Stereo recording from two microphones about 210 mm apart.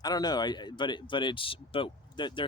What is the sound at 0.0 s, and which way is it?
Speech, 20° left (ahead or behind).